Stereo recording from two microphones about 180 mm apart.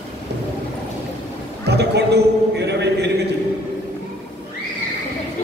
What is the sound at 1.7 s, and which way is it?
A man's voice, 65° right (ahead or behind).